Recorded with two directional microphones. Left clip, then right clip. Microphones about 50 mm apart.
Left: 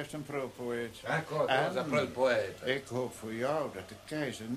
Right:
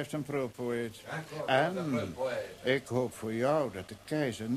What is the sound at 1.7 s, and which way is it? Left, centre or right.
Speech, right.